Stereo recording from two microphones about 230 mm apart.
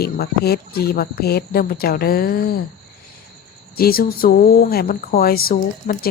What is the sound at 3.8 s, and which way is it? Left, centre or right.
Speech, left.